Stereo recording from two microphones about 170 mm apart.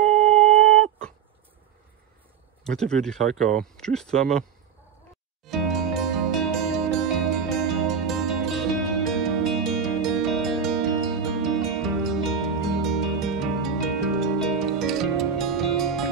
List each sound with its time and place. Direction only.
0.1 s a sound: 40° right (ahead or behind)
2.6 s speech: 5° left (ahead or behind)
5.4 s music: centre (ahead or behind)